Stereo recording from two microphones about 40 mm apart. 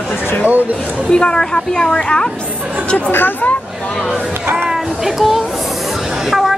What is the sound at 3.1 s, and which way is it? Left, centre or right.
Speech, left.